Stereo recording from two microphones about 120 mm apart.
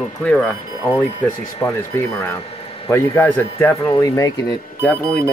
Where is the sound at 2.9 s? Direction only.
20° left (ahead or behind).